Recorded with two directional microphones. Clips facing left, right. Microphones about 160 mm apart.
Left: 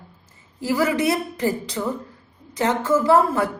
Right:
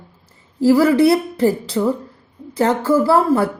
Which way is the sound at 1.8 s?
10° right (ahead or behind).